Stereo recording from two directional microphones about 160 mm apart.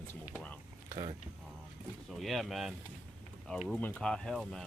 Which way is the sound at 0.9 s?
30° right (ahead or behind).